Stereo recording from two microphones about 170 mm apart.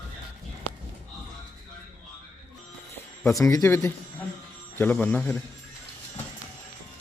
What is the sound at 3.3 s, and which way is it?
A man's voice, 20° left (ahead or behind).